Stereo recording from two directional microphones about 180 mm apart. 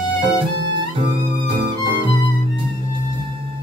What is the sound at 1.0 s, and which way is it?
Music, 30° right (ahead or behind).